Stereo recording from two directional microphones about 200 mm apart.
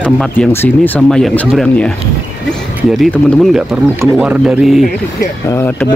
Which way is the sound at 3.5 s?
5° right (ahead or behind).